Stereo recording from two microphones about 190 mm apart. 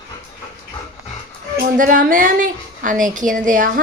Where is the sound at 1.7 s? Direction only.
45° right (ahead or behind).